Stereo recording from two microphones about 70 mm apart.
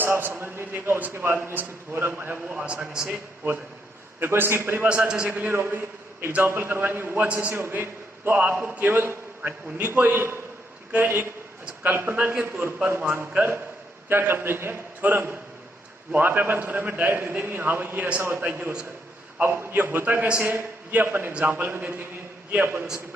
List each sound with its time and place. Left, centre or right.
0.0 s a man's voice: right
2.5 s a man's voice: centre
4.2 s a man's voice: right
4.9 s a man's voice: centre
5.3 s a man's voice: right